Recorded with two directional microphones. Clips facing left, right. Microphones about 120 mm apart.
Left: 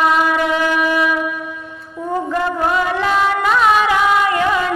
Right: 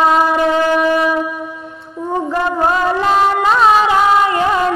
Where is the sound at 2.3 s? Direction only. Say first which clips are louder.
Right 2 dB; 30° right (ahead or behind).